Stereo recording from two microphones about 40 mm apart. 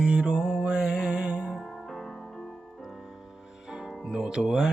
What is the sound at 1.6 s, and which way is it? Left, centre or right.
Music, centre.